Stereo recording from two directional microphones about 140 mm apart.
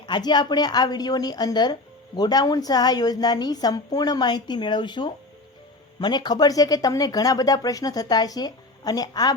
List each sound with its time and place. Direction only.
0.0 s a woman's voice: 30° left (ahead or behind)